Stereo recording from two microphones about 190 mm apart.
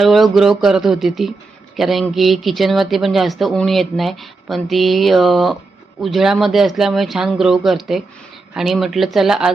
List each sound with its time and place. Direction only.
0.0 s speech: centre (ahead or behind)